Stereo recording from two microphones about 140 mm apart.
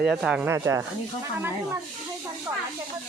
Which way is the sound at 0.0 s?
5° right (ahead or behind).